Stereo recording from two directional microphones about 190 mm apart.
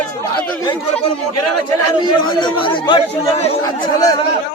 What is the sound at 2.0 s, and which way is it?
Speech, 25° left (ahead or behind).